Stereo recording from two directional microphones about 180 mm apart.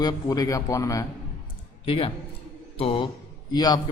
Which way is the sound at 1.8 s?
30° left (ahead or behind).